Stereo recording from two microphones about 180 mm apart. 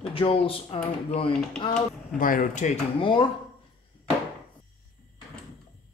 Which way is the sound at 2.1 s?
50° left (ahead or behind).